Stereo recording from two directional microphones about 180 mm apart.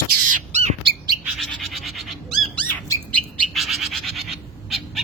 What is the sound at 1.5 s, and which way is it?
Bird, centre (ahead or behind).